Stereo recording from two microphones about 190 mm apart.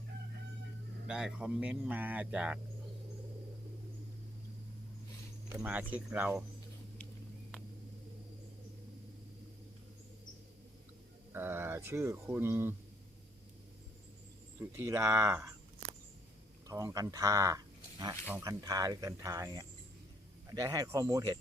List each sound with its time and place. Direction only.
1.0 s speech: 5° right (ahead or behind)
5.5 s speech: 10° right (ahead or behind)
11.3 s speech: 10° right (ahead or behind)
14.6 s speech: 15° right (ahead or behind)
16.6 s speech: 15° right (ahead or behind)